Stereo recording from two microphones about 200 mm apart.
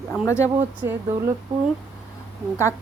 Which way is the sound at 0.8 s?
10° right (ahead or behind).